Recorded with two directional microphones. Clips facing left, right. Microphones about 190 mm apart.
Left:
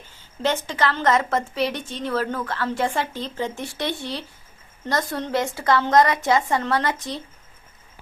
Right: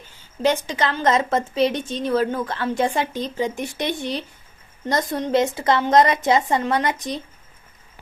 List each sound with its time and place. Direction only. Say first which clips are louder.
0.4 s a woman's voice: right 2 dB; 15° right (ahead or behind)